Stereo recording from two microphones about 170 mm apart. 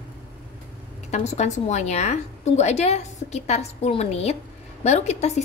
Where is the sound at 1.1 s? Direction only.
40° left (ahead or behind).